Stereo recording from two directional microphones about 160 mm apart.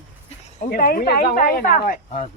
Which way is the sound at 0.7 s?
65° left (ahead or behind).